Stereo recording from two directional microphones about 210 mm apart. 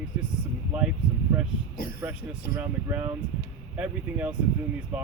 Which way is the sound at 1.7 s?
45° left (ahead or behind).